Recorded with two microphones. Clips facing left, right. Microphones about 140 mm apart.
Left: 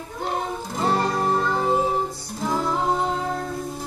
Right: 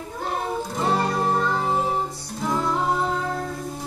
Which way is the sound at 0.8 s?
Centre (ahead or behind).